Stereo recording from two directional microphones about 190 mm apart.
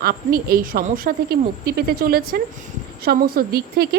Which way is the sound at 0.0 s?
55° right (ahead or behind).